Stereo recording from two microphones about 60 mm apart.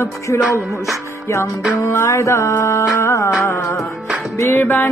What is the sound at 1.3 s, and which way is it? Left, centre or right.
Music, left.